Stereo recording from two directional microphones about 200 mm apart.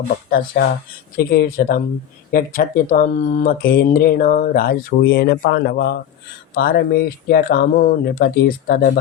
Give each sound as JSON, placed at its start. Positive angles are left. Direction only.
{"t": 0.3, "sound": "speech", "side_deg": 45}